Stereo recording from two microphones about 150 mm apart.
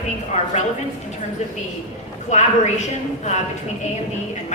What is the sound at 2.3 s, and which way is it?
A woman's voice, 50° left (ahead or behind).